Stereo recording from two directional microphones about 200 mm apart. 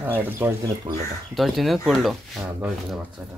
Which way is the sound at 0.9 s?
25° right (ahead or behind).